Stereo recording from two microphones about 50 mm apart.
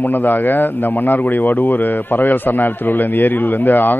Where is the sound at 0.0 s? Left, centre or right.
Left.